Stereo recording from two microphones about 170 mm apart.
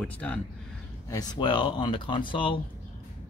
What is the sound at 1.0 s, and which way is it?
Speech, 20° left (ahead or behind).